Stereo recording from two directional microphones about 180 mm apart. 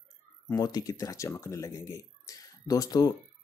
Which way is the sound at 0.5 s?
20° left (ahead or behind).